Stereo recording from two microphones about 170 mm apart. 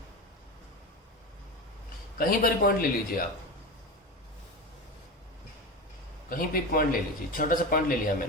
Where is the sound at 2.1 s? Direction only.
60° left (ahead or behind).